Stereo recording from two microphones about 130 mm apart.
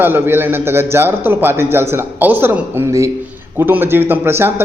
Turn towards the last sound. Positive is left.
turn(degrees=-20)  # may be behind; listen again after turning